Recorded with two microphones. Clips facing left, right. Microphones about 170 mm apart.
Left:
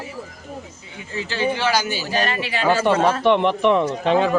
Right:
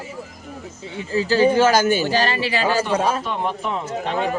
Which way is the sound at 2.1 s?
30° right (ahead or behind).